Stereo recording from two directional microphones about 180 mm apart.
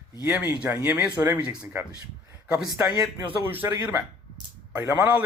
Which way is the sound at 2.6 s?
20° right (ahead or behind).